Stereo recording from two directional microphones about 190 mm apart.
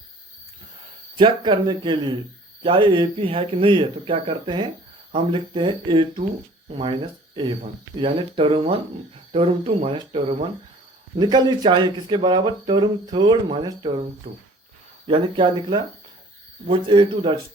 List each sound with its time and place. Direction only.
1.2 s speech: 25° right (ahead or behind)